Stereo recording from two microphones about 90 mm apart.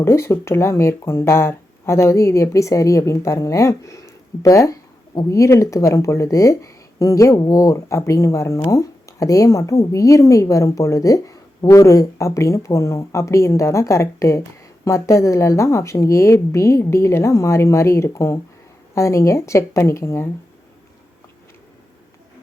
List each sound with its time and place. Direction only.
0.0 s speech: 30° left (ahead or behind)